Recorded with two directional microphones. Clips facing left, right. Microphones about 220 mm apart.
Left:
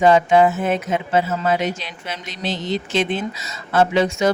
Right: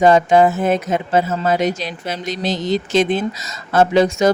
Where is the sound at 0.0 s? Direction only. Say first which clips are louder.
Right 2 dB; 40° right (ahead or behind).